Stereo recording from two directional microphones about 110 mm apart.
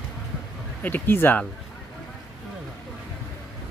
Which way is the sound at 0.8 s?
20° left (ahead or behind).